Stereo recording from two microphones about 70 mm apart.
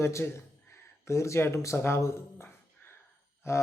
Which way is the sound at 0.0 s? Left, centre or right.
Left.